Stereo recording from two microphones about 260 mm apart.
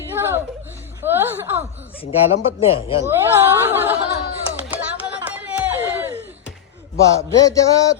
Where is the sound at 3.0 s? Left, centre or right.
Centre.